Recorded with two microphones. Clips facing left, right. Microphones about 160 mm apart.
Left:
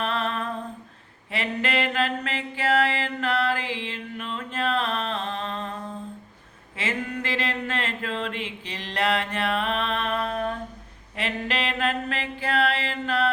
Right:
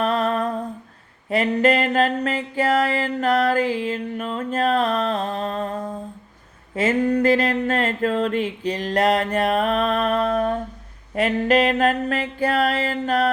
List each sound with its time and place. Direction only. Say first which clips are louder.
0.0 s humming: right 7 dB; 40° right (ahead or behind)
1.3 s a sound: right 9 dB; 45° right (ahead or behind)
11.1 s mantra: right 11 dB; 45° right (ahead or behind)